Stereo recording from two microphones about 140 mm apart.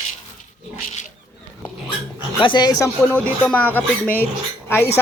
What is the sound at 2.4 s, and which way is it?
Speech, 30° left (ahead or behind).